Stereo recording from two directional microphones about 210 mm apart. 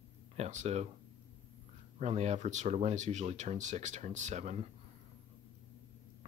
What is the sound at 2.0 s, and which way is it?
Speech, 30° right (ahead or behind).